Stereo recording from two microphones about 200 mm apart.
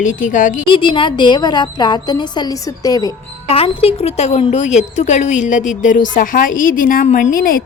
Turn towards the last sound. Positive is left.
turn(degrees=45)  # may be behind; listen again after turning